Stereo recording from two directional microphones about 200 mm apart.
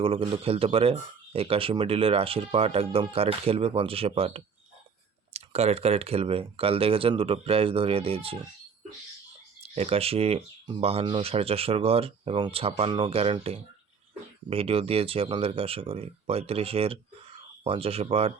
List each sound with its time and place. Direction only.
0.0 s speech: 25° right (ahead or behind)
9.7 s speech: 30° right (ahead or behind)